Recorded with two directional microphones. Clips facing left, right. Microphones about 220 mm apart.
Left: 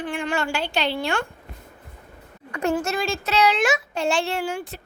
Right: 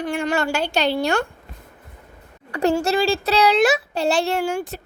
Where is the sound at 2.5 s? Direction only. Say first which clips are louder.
Right 4 dB; 35° right (ahead or behind).